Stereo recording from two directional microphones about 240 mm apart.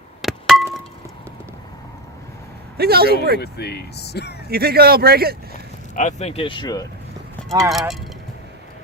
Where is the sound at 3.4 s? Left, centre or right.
Left.